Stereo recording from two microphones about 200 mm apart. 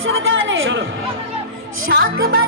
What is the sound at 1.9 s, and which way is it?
Music, 50° right (ahead or behind).